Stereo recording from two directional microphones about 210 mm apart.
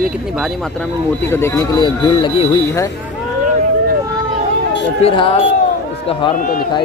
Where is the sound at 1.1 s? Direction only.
10° left (ahead or behind).